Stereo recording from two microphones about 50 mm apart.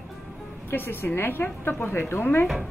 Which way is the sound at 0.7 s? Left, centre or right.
Left.